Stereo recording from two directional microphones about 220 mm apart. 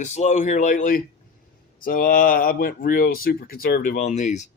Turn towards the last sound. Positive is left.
turn(degrees=30)  # may be behind; listen again after turning